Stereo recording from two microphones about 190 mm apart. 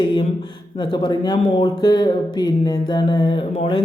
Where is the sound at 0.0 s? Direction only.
25° left (ahead or behind).